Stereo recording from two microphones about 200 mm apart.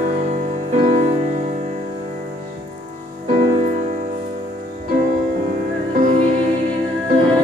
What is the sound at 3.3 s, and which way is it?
Music, 40° right (ahead or behind).